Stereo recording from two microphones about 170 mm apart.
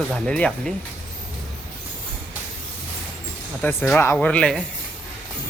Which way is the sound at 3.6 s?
10° left (ahead or behind).